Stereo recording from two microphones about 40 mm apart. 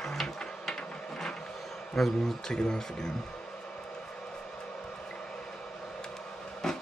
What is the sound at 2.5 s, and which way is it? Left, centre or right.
Speech, centre.